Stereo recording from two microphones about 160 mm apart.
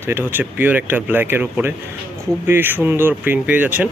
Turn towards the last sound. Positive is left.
turn(degrees=-10)  # may be behind; listen again after turning